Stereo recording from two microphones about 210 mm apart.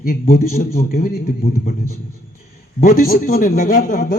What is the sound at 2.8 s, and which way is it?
A man's voice, 40° left (ahead or behind).